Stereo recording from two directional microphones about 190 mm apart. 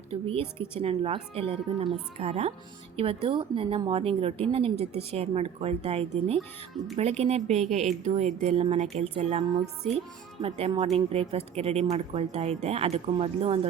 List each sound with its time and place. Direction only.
0.1 s a woman's voice: 30° right (ahead or behind)
10.9 s a woman's voice: 30° right (ahead or behind)